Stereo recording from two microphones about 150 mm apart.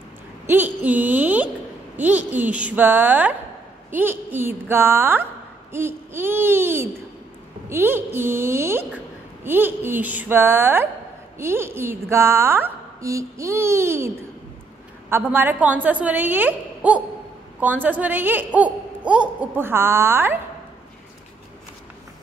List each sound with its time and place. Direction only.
0.5 s a woman's voice: 10° right (ahead or behind)